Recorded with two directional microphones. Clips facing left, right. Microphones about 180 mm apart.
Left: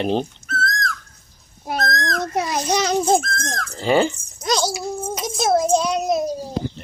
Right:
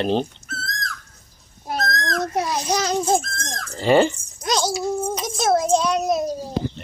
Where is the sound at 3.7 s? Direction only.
Centre (ahead or behind).